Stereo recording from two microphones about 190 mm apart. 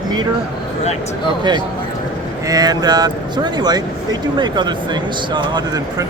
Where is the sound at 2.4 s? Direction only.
20° right (ahead or behind).